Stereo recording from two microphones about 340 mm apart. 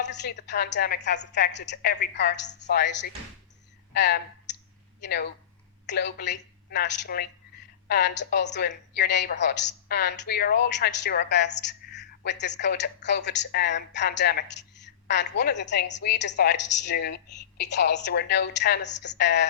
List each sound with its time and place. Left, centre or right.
0.0 s a woman's voice: left